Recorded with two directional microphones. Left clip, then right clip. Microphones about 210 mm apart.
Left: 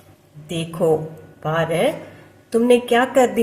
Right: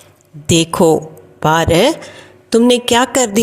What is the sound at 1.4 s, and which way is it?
A woman's voice, 50° right (ahead or behind).